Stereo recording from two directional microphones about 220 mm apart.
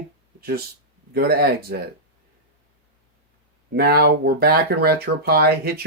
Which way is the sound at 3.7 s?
45° right (ahead or behind).